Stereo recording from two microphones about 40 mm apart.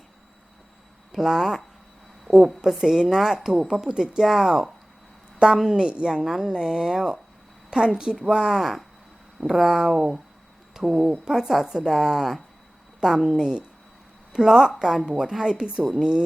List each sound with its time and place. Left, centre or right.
1.1 s speech: centre
5.4 s speech: right
6.2 s speech: centre